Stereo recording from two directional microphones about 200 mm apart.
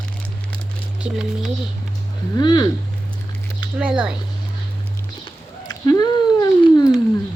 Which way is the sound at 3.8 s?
5° right (ahead or behind).